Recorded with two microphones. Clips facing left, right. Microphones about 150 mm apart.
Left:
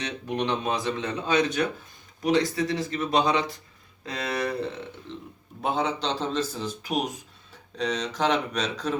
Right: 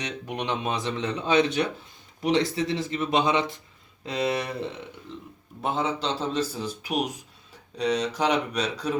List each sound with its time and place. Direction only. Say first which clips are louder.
0.3 s speech: left 2 dB; 15° right (ahead or behind)
5.6 s a man's voice: even; centre (ahead or behind)